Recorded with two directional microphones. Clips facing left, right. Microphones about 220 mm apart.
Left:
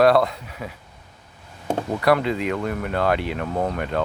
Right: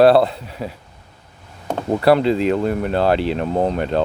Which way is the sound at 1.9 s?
30° right (ahead or behind).